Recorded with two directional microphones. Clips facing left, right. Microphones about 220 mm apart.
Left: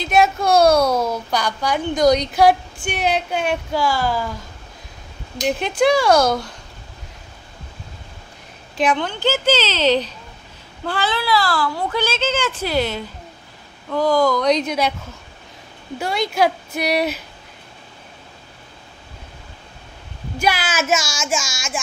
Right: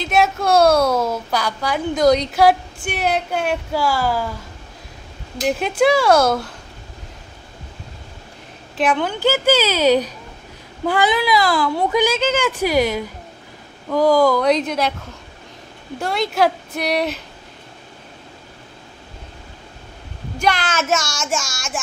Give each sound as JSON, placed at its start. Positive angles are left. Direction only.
{"t": 0.0, "sound": "a woman's voice", "side_deg": 0}
{"t": 5.4, "sound": "a woman's voice", "side_deg": -5}
{"t": 8.7, "sound": "a woman's voice", "side_deg": -5}
{"t": 16.0, "sound": "a woman's voice", "side_deg": 0}
{"t": 20.3, "sound": "a woman's voice", "side_deg": 5}